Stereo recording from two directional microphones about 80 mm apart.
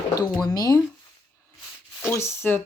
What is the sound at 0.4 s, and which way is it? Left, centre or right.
Speech, left.